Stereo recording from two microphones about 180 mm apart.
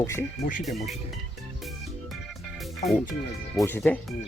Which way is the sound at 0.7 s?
Centre (ahead or behind).